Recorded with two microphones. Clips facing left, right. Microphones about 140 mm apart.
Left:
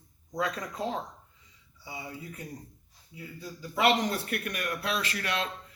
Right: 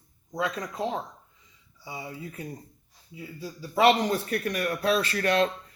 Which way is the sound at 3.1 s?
25° right (ahead or behind).